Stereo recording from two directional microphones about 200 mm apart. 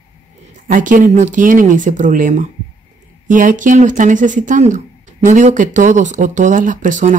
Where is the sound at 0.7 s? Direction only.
40° right (ahead or behind).